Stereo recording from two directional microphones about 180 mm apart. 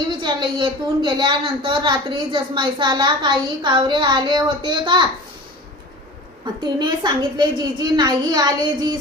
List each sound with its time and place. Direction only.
0.2 s speech: 25° right (ahead or behind)
6.6 s speech: 25° right (ahead or behind)